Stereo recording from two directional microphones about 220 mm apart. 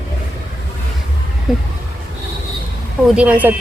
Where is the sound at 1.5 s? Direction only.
Centre (ahead or behind).